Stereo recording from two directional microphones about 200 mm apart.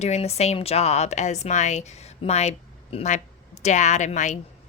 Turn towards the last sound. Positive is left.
turn(degrees=35)  # may be behind; listen again after turning